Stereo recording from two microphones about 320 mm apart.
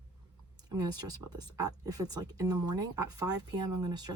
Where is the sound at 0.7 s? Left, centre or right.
Centre.